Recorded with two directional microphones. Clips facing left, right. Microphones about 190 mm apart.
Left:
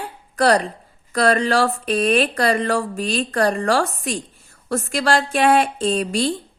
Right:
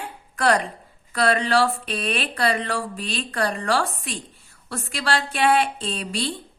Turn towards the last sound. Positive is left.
turn(degrees=45)  # may be behind; listen again after turning